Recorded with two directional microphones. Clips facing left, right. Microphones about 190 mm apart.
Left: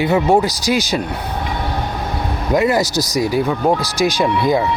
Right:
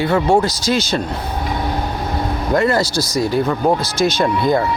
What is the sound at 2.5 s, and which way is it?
Speech, 15° left (ahead or behind).